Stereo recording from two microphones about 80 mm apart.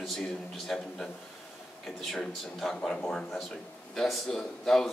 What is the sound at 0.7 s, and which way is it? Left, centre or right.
A man's voice, centre.